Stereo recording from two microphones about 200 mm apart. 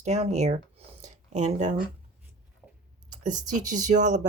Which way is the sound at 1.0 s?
35° right (ahead or behind).